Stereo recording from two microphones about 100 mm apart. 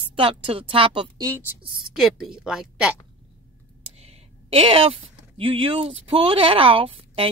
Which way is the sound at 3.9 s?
80° right.